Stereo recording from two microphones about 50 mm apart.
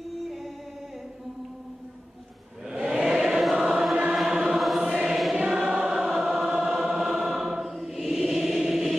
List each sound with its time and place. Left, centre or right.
2.6 s choir: centre
5.6 s choir: right
5.9 s choir: centre